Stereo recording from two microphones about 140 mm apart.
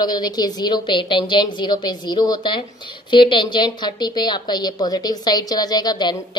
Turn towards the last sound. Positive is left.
turn(degrees=30)  # may be behind; listen again after turning